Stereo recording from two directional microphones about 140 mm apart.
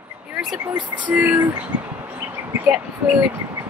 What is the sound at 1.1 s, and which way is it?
Speech, 10° right (ahead or behind).